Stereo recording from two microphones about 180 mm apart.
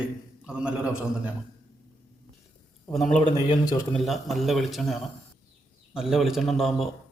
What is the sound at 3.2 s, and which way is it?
Speech, 25° left (ahead or behind).